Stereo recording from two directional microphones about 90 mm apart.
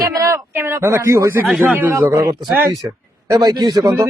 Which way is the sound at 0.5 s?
25° right (ahead or behind).